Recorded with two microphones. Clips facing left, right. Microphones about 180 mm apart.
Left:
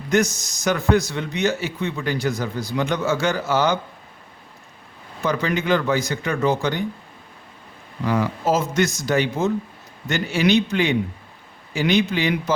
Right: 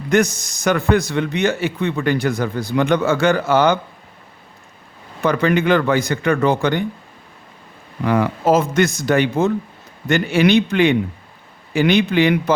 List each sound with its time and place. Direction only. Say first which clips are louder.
0.1 s a man's voice: right 3 dB; 55° right (ahead or behind)
5.2 s a man's voice: right 6 dB; 60° right (ahead or behind)
8.0 s a man's voice: right 4 dB; 60° right (ahead or behind)